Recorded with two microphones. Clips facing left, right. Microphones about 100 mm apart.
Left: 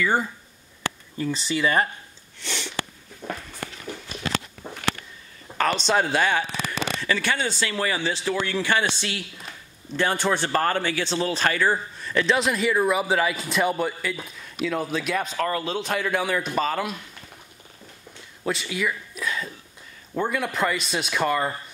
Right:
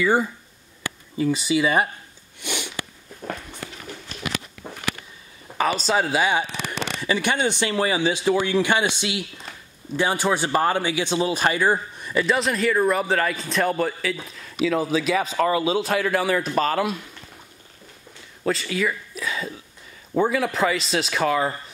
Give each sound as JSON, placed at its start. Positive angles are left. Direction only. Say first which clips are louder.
{"t": 0.0, "sound": "a man's voice", "louder": "right 3 dB", "side_deg": -10}
{"t": 2.4, "sound": "sniff", "louder": "right 2 dB", "side_deg": -15}
{"t": 4.6, "sound": "a sound", "louder": "even", "side_deg": -5}
{"t": 5.6, "sound": "a man's voice", "louder": "even", "side_deg": -5}
{"t": 12.2, "sound": "a man's voice", "louder": "right 1 dB", "side_deg": 0}
{"t": 18.4, "sound": "a man's voice", "louder": "right 3 dB", "side_deg": 5}